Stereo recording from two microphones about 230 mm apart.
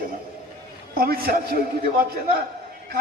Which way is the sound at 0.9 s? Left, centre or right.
Right.